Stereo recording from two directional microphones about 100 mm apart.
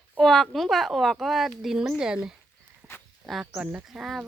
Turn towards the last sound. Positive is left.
turn(degrees=-5)  # may be behind; listen again after turning